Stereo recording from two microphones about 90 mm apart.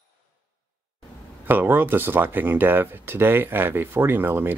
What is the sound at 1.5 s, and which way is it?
Speech, 20° right (ahead or behind).